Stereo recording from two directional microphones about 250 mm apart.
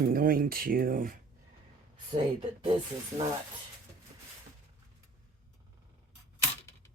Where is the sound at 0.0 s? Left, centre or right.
Right.